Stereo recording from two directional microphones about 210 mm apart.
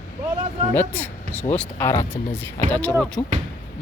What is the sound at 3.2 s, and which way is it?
Speech, 20° left (ahead or behind).